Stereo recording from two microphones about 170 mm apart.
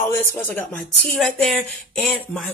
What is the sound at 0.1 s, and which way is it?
Speech, 10° left (ahead or behind).